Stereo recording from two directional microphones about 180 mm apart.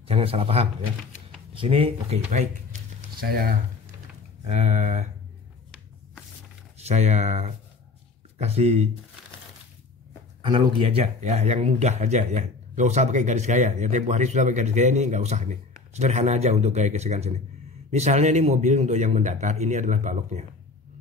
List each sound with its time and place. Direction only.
0.1 s speech: 30° right (ahead or behind)
3.2 s speech: 55° right (ahead or behind)
4.5 s speech: 35° right (ahead or behind)
6.8 s speech: 35° right (ahead or behind)
10.4 s speech: 30° right (ahead or behind)